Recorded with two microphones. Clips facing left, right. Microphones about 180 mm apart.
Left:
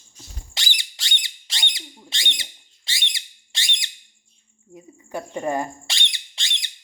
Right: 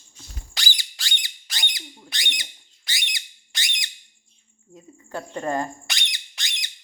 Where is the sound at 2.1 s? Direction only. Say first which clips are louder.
Left 1 dB; 25° left (ahead or behind).